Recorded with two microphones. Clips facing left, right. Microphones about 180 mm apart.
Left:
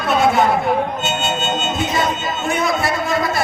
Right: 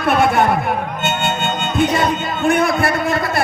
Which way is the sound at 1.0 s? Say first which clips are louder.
Right 1 dB; 60° right (ahead or behind).